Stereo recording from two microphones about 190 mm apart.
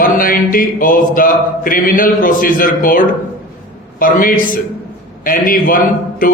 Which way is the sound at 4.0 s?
45° left (ahead or behind).